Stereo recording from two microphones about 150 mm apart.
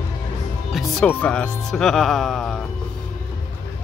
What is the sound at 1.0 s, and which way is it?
Speech, 10° left (ahead or behind).